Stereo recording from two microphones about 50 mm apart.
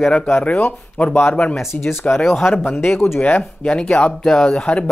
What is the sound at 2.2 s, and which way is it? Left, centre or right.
Speech, centre.